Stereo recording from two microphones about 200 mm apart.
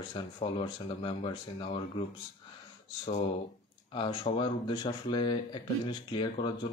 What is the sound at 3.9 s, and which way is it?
Speech, 25° left (ahead or behind).